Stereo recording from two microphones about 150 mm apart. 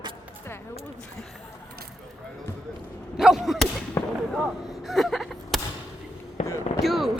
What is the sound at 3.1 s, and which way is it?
Whip, 5° right (ahead or behind).